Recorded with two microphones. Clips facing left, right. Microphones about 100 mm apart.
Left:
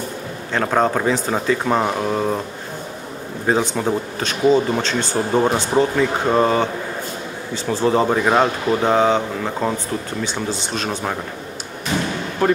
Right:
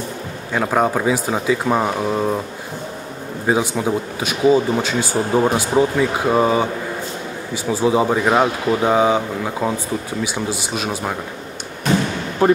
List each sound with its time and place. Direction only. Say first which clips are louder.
0.5 s speech: even; 5° right (ahead or behind)
3.4 s speech: even; 5° right (ahead or behind)
12.4 s speech: right 3 dB; 15° right (ahead or behind)